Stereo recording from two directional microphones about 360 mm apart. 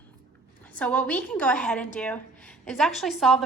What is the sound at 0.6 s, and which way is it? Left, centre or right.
A woman's voice, centre.